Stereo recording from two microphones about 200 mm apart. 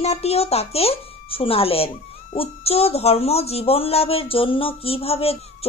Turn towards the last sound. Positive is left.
turn(degrees=30)  # may be behind; listen again after turning